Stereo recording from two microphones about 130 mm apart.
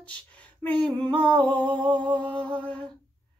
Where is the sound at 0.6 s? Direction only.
10° left (ahead or behind).